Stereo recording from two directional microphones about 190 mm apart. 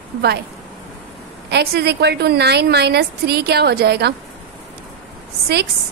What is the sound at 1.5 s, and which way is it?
A woman's voice, 60° right (ahead or behind).